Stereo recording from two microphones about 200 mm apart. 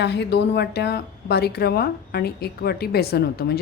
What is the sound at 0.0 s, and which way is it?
A woman's voice, 60° left (ahead or behind).